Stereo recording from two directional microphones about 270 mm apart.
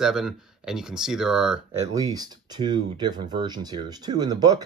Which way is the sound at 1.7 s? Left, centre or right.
Centre.